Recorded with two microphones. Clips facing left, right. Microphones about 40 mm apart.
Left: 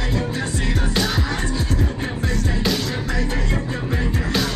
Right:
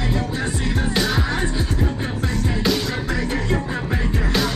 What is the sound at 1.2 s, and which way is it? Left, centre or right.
Music, centre.